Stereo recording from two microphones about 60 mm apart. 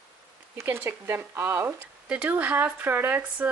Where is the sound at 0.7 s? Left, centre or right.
Right.